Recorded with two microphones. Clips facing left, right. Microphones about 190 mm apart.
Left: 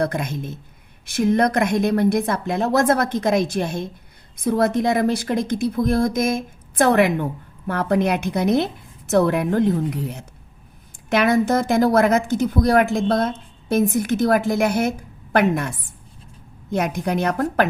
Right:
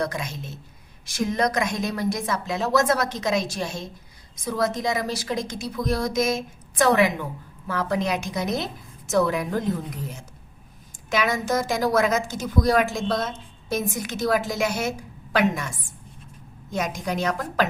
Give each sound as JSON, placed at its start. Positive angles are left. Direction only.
{"t": 0.0, "sound": "a woman's voice", "side_deg": 55}